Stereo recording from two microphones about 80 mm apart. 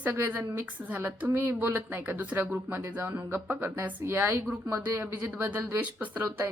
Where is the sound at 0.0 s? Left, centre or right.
Right.